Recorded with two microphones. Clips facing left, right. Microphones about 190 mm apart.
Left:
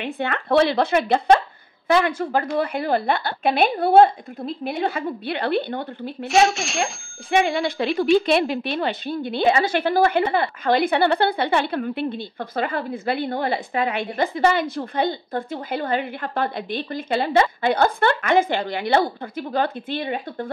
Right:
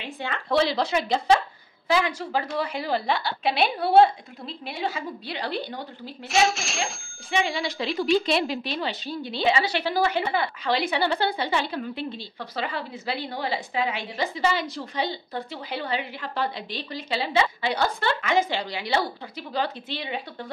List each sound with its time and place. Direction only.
0.0 s a woman's voice: 60° left (ahead or behind)
6.2 s speech: centre (ahead or behind)
7.2 s a woman's voice: 55° left (ahead or behind)